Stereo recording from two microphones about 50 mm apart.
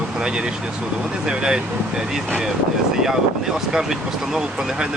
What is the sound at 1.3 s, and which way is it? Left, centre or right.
Speech, centre.